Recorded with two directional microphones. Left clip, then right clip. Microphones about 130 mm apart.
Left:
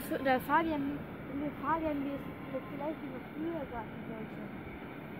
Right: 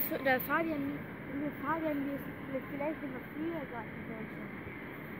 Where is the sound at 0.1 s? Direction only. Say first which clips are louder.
Left 2 dB; 65° left (ahead or behind).